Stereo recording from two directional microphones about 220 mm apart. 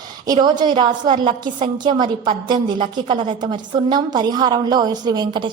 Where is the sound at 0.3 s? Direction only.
20° right (ahead or behind).